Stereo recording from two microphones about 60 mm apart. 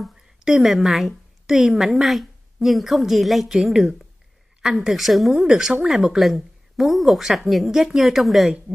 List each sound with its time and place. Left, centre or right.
0.0 s a woman's voice: centre